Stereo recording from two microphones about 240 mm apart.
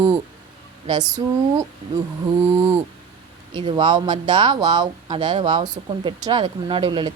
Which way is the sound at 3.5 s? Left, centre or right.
Centre.